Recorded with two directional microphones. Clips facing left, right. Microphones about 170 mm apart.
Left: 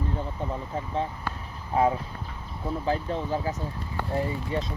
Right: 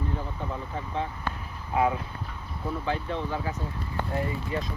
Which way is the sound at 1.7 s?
35° left (ahead or behind).